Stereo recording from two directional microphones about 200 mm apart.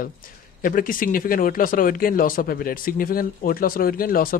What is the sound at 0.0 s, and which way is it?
Speech, 45° left (ahead or behind).